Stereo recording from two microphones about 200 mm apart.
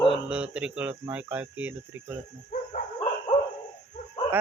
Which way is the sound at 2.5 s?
40° left (ahead or behind).